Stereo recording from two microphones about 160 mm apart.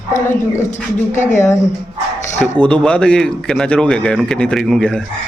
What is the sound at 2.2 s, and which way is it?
Speech, 50° left (ahead or behind).